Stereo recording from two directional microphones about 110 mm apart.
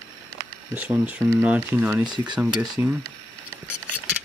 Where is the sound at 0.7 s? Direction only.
10° right (ahead or behind).